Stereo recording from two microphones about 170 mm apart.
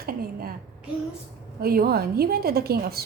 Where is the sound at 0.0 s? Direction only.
60° right (ahead or behind).